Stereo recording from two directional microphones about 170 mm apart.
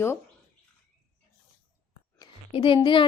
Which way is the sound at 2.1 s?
30° left (ahead or behind).